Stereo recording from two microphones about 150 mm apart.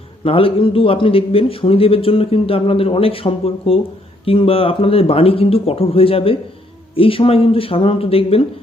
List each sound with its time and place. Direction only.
0.3 s a man's voice: 35° left (ahead or behind)